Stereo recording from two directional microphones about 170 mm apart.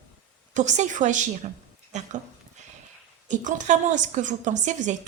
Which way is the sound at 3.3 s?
50° right (ahead or behind).